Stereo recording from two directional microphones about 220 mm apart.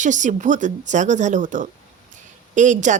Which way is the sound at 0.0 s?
35° right (ahead or behind).